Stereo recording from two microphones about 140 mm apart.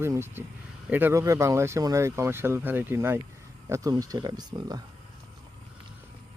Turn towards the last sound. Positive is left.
turn(degrees=-30)  # may be behind; listen again after turning